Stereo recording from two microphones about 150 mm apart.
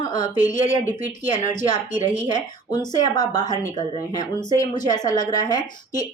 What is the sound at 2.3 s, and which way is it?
A woman's voice, 25° left (ahead or behind).